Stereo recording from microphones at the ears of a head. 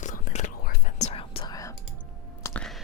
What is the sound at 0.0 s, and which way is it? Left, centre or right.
Whispering, left.